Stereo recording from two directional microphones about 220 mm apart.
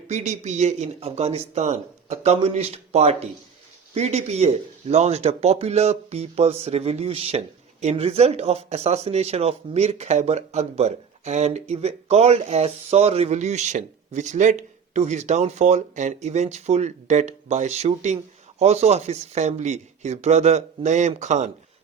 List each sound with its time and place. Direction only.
0.1 s speech: 30° right (ahead or behind)